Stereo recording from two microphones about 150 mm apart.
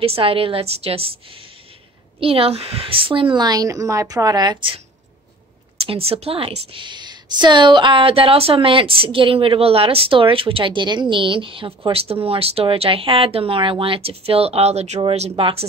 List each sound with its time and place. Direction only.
0.0 s a woman's voice: 40° right (ahead or behind)
2.1 s a woman's voice: 40° right (ahead or behind)
5.9 s a woman's voice: 40° right (ahead or behind)